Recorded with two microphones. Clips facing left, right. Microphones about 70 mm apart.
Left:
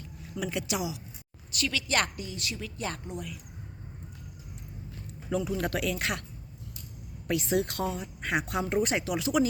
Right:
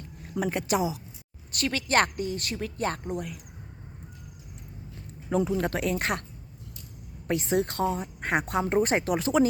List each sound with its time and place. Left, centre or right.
0.2 s a woman's voice: right
5.3 s speech: right
7.3 s speech: right